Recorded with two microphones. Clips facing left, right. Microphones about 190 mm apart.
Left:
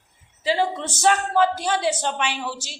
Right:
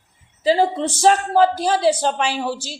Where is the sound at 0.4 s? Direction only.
35° right (ahead or behind).